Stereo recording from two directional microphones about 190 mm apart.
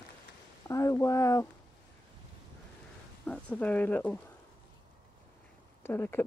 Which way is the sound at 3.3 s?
5° left (ahead or behind).